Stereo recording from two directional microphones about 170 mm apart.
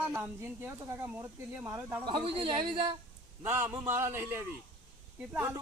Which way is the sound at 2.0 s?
30° right (ahead or behind).